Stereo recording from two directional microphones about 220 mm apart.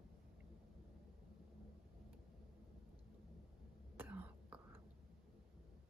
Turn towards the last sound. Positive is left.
turn(degrees=-10)  # may be behind; listen again after turning